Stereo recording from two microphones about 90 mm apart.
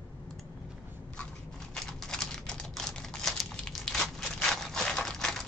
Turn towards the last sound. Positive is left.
turn(degrees=5)  # may be behind; listen again after turning